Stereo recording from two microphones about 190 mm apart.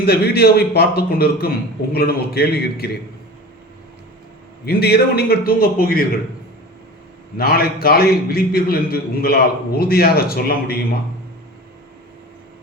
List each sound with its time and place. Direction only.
0.0 s a man's voice: 55° left (ahead or behind)
4.6 s a man's voice: 55° left (ahead or behind)
7.3 s a man's voice: 55° left (ahead or behind)